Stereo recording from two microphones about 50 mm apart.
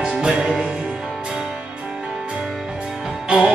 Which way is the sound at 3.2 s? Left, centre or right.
Centre.